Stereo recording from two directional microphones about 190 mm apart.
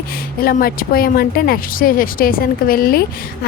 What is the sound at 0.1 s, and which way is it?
A woman's voice, 50° left (ahead or behind).